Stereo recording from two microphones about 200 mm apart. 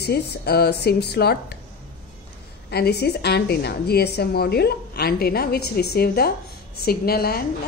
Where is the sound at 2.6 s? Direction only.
55° left (ahead or behind).